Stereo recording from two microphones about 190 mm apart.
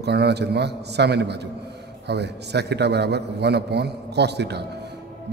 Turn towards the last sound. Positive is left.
turn(degrees=-60)  # may be behind; listen again after turning